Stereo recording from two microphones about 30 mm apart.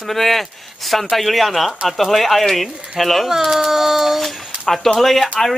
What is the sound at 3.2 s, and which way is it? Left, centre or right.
Speech, centre.